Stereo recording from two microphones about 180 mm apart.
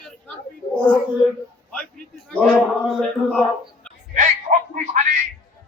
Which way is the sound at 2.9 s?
5° left (ahead or behind).